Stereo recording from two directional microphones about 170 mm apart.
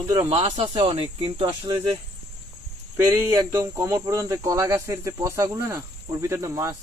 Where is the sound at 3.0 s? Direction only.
15° right (ahead or behind).